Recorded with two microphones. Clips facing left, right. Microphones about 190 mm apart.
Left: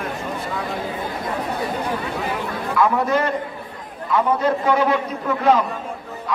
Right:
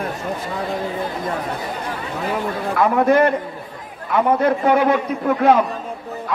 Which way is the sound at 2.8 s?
60° right (ahead or behind).